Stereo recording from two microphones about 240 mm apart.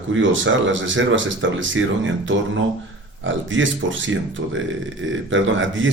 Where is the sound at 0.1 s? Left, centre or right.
Right.